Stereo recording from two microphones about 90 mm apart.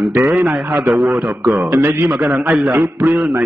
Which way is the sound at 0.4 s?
15° right (ahead or behind).